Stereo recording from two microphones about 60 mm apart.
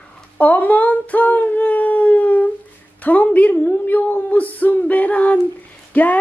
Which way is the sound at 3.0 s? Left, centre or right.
Left.